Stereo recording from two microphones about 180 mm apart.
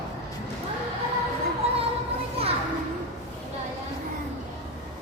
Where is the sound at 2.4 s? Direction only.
35° right (ahead or behind).